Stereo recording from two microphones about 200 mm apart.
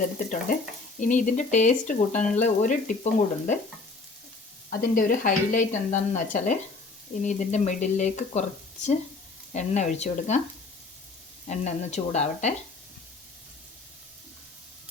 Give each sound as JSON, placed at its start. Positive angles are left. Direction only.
{"t": 0.9, "sound": "speech", "side_deg": 40}
{"t": 4.7, "sound": "speech", "side_deg": 45}
{"t": 11.4, "sound": "speech", "side_deg": 35}